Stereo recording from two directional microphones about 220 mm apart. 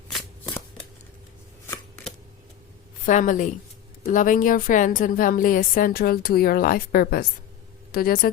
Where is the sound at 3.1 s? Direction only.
35° left (ahead or behind).